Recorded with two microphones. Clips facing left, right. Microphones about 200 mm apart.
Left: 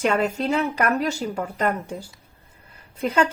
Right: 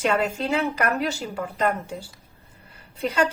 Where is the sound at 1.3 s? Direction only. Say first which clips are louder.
Even; 50° left (ahead or behind).